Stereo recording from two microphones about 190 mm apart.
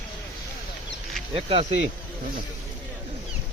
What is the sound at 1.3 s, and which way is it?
Speech, 30° right (ahead or behind).